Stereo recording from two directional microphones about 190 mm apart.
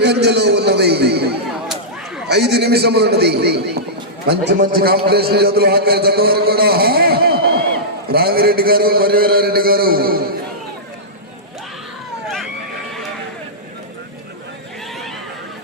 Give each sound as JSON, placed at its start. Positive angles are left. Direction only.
{"t": 0.0, "sound": "a sound", "side_deg": -60}
{"t": 1.6, "sound": "whip", "side_deg": -5}
{"t": 2.3, "sound": "a man's voice", "side_deg": -60}